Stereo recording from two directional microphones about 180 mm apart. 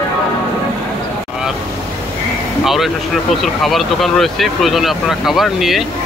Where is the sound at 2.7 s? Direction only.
Centre (ahead or behind).